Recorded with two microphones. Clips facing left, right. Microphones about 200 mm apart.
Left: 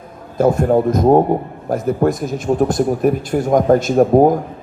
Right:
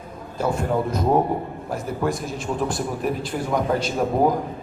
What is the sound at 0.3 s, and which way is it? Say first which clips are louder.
A man's voice: left 9 dB; 45° left (ahead or behind).